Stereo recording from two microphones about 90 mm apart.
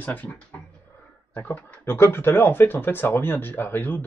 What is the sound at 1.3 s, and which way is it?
Speech, 20° left (ahead or behind).